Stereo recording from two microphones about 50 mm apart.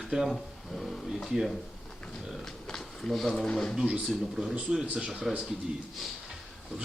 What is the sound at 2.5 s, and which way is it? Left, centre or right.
Speech, centre.